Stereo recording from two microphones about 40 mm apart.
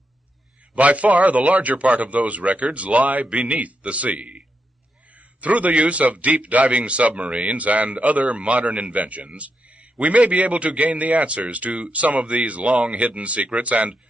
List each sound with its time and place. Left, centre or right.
0.7 s a man's voice: right